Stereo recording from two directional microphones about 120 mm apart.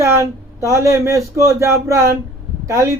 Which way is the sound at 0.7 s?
25° right (ahead or behind).